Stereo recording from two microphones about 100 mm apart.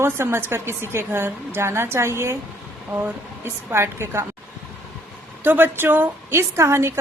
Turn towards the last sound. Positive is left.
turn(degrees=-25)  # may be behind; listen again after turning